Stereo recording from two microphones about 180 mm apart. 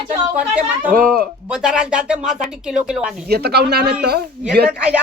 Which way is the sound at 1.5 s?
5° right (ahead or behind).